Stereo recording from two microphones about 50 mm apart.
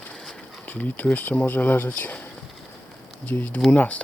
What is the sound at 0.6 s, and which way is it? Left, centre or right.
Speech, left.